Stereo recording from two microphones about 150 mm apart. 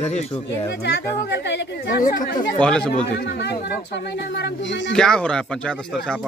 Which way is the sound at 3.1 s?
90° left.